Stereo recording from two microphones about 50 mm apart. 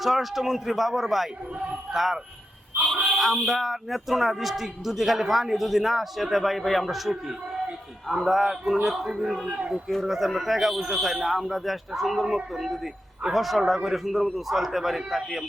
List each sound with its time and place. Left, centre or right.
0.0 s speech: centre
9.5 s speech: centre
9.9 s speech: centre